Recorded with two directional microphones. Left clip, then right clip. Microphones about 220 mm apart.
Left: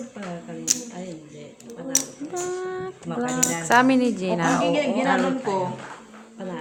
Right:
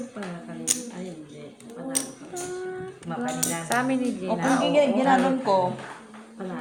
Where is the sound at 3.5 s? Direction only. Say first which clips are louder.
Left 9 dB; 50° left (ahead or behind).